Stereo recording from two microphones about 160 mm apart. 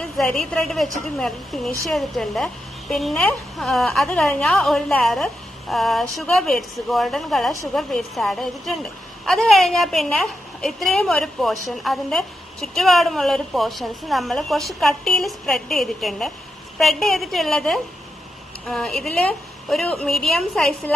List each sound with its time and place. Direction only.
0.0 s a woman's voice: 5° left (ahead or behind)